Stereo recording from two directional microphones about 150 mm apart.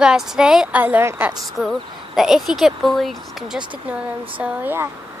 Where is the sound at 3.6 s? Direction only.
35° right (ahead or behind).